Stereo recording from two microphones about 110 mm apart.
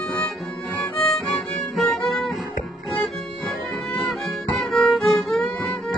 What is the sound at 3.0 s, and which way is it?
Violin, 5° left (ahead or behind).